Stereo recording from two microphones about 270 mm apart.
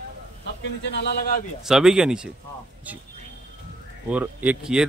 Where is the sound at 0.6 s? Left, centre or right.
Left.